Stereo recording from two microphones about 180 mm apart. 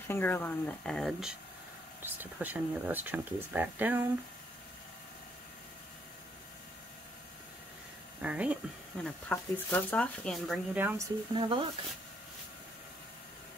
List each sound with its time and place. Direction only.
0.1 s speech: 10° left (ahead or behind)
2.0 s speech: 10° right (ahead or behind)
8.2 s speech: 5° right (ahead or behind)
9.0 s speech: 5° left (ahead or behind)
10.8 s speech: 10° right (ahead or behind)
11.3 s speech: 25° right (ahead or behind)